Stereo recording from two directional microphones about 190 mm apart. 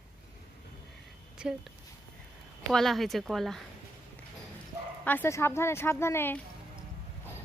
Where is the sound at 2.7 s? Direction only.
Centre (ahead or behind).